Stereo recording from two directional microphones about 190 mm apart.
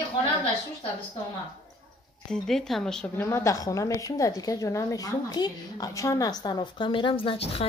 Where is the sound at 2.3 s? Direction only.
Centre (ahead or behind).